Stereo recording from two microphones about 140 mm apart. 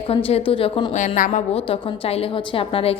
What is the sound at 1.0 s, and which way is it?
Speech, 65° left (ahead or behind).